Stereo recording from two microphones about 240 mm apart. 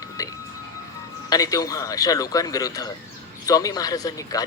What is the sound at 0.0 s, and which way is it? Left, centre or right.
Music, centre.